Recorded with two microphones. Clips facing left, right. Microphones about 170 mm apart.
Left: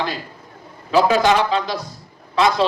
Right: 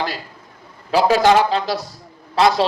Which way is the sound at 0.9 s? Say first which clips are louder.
Right 1 dB; 40° right (ahead or behind).